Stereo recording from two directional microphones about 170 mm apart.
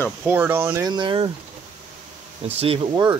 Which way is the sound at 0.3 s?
10° right (ahead or behind).